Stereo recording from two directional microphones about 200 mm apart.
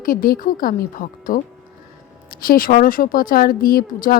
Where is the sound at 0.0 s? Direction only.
45° left (ahead or behind).